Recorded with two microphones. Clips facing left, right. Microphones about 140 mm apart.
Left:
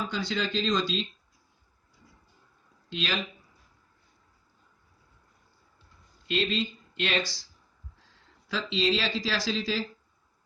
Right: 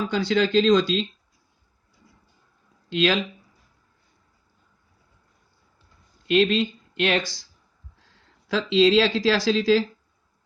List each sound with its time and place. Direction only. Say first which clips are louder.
0.1 s speech: right 10 dB; 90° right
2.9 s speech: right 11 dB; 70° right (ahead or behind)
6.2 s speech: right 9 dB; 60° right (ahead or behind)
8.4 s speech: right 9 dB; 80° right